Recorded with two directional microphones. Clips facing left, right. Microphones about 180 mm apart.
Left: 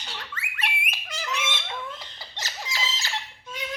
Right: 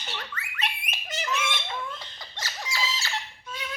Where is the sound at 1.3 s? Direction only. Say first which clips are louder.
Right 1 dB; 20° left (ahead or behind).